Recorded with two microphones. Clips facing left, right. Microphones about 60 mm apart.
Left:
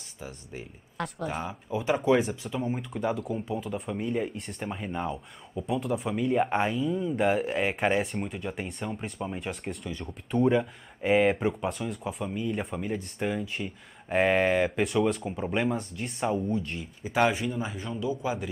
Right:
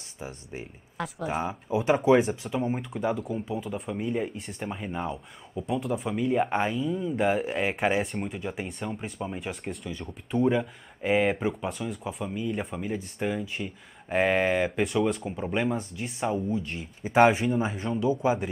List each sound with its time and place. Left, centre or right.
0.9 s speech: centre
17.1 s speech: right